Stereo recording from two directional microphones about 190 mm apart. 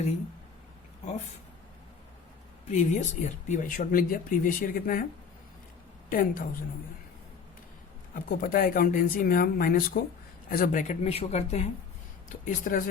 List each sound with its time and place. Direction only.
2.6 s speech: 40° left (ahead or behind)
6.1 s speech: 45° left (ahead or behind)
8.1 s speech: 45° left (ahead or behind)